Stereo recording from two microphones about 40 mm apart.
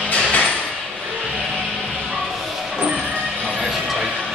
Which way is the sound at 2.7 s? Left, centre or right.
Centre.